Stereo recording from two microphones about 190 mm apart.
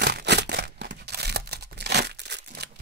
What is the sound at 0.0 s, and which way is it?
Tearing, 60° right (ahead or behind).